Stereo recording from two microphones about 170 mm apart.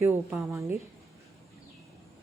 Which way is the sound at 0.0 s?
10° right (ahead or behind).